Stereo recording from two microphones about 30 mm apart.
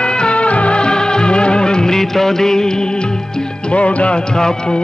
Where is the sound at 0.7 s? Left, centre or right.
Left.